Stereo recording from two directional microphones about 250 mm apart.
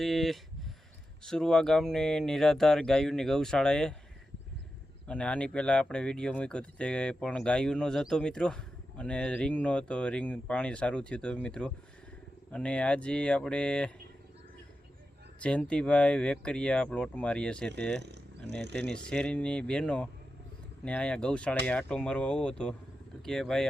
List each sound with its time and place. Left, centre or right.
0.0 s speech: centre
5.0 s speech: centre
15.4 s speech: centre
18.0 s a sound: right
18.7 s speech: centre